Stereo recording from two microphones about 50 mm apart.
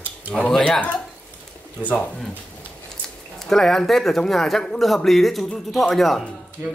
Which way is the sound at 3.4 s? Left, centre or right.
Centre.